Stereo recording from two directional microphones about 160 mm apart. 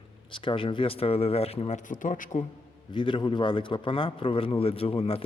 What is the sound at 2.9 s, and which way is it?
A man's voice, 30° left (ahead or behind).